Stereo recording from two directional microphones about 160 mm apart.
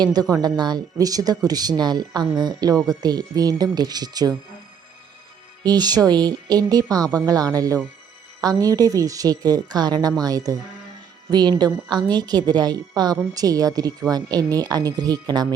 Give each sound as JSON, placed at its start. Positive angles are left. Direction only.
{"t": 0.0, "sound": "speech", "side_deg": -25}
{"t": 5.6, "sound": "speech", "side_deg": -25}